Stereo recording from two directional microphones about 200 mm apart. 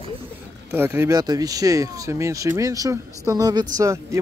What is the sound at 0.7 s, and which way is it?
Speech, 10° right (ahead or behind).